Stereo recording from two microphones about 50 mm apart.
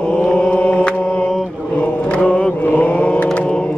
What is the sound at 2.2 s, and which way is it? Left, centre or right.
Mantra, left.